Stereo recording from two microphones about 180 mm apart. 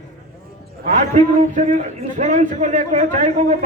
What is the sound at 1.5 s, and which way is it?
A man's voice, 40° right (ahead or behind).